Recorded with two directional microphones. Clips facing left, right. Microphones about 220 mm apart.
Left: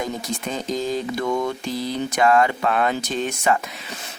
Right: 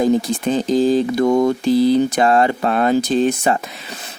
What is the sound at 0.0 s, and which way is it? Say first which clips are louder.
Speech: right 11 dB; 35° right (ahead or behind).